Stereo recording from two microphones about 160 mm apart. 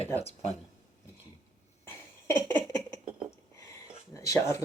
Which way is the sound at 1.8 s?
15° left (ahead or behind).